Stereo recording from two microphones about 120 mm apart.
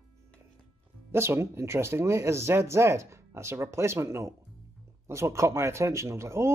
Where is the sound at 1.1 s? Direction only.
20° right (ahead or behind).